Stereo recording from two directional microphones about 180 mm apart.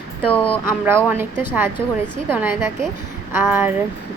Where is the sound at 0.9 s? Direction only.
10° right (ahead or behind).